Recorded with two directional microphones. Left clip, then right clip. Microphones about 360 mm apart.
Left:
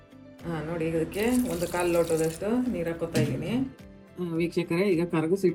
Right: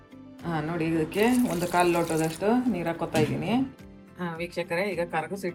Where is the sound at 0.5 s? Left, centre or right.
Right.